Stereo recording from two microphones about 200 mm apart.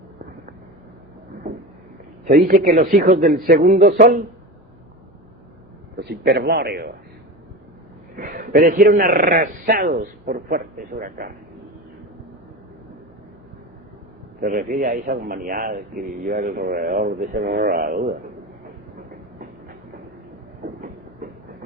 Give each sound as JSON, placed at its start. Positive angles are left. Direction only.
{"t": 2.2, "sound": "a man's voice", "side_deg": -45}
{"t": 6.0, "sound": "a man's voice", "side_deg": -55}
{"t": 8.1, "sound": "a man's voice", "side_deg": -45}
{"t": 14.4, "sound": "a man's voice", "side_deg": -45}
{"t": 21.2, "sound": "train", "side_deg": -40}